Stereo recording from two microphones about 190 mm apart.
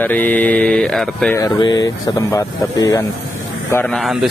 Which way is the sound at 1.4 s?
20° left (ahead or behind).